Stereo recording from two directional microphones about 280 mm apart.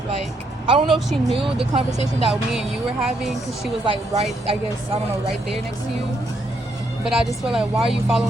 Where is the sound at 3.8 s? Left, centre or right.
Centre.